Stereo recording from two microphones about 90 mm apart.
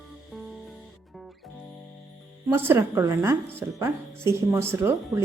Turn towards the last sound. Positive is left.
turn(degrees=-30)  # may be behind; listen again after turning